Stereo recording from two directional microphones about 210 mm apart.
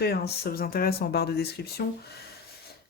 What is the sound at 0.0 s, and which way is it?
Speech, 45° left (ahead or behind).